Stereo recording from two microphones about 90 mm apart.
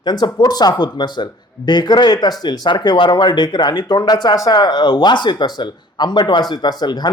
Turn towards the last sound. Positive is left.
turn(degrees=50)  # may be behind; listen again after turning